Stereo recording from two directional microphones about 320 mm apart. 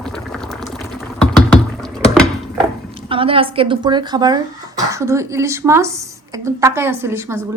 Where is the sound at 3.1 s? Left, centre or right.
Centre.